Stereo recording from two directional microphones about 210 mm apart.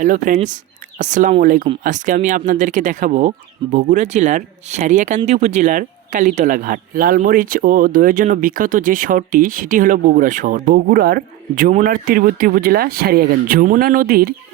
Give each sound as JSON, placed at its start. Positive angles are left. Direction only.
{"t": 0.0, "sound": "speech", "side_deg": -35}